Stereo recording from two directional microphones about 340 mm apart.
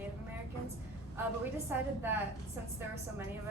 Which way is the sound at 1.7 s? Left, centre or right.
Centre.